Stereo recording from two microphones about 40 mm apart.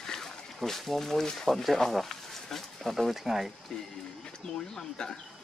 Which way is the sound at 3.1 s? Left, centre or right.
Centre.